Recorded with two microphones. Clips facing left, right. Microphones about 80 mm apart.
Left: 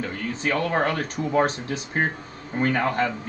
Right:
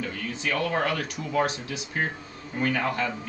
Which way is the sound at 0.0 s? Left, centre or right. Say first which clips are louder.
Left 4 dB; left.